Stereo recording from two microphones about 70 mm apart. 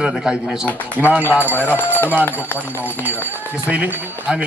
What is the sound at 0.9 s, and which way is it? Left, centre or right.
Speech, right.